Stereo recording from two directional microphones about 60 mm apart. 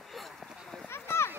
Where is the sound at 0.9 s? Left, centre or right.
Left.